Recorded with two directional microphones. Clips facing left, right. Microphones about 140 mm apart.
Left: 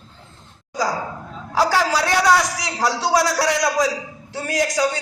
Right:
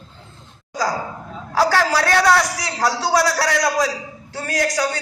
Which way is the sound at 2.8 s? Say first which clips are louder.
Even; 15° left (ahead or behind).